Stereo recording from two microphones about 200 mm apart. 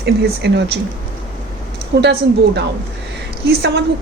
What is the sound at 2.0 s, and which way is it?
A woman's voice, 60° right (ahead or behind).